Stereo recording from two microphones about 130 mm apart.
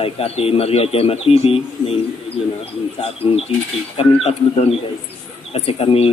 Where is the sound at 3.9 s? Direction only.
50° left (ahead or behind).